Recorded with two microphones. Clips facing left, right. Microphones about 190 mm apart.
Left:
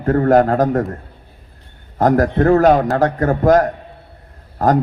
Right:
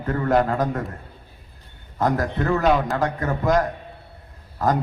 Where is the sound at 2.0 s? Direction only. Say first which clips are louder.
Left 8 dB; 45° left (ahead or behind).